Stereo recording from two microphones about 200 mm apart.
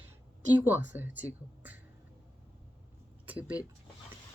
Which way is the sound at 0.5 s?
10° right (ahead or behind).